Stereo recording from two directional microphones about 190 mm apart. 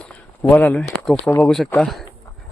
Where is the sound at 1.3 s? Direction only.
15° left (ahead or behind).